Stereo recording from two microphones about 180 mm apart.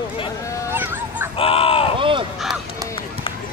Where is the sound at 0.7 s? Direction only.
10° right (ahead or behind).